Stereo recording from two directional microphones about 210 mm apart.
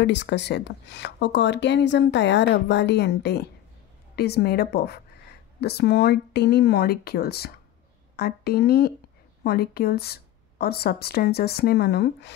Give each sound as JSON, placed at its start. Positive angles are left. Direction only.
{"t": 0.0, "sound": "speech", "side_deg": 55}